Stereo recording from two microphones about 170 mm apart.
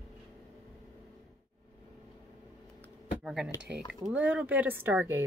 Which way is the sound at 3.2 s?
Centre (ahead or behind).